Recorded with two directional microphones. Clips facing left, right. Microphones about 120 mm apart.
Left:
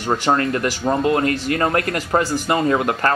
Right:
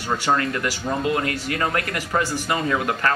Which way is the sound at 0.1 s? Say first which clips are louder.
Left 4 dB; 30° left (ahead or behind).